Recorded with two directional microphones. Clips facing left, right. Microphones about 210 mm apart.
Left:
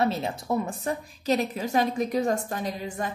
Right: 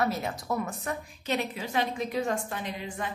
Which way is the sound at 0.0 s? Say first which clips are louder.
Left 3 dB; 25° left (ahead or behind).